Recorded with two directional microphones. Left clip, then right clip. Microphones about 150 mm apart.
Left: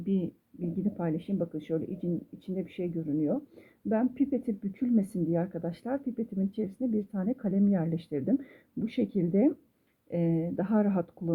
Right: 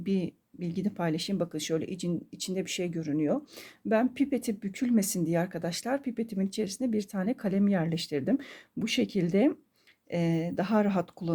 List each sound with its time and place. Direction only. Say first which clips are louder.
0.0 s speech: right 1 dB; 20° right (ahead or behind)